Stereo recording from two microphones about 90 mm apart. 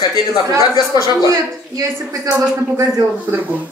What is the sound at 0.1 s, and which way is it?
Speech, 45° left (ahead or behind).